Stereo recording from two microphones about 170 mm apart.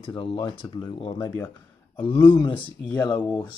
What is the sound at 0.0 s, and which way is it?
Speech, 30° left (ahead or behind).